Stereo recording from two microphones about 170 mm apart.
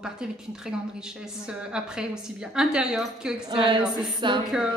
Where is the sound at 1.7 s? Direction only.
5° right (ahead or behind).